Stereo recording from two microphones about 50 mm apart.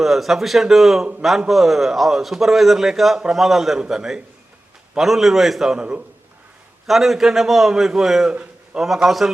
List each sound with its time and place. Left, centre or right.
0.0 s a man's voice: centre
5.7 s a man's voice: right
6.8 s a man's voice: centre